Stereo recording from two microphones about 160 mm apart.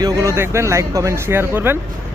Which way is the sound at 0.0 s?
20° right (ahead or behind).